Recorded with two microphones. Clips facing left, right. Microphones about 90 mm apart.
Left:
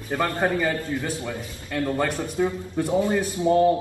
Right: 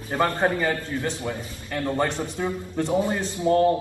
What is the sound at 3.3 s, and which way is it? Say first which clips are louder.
Speech: even; 20° left (ahead or behind).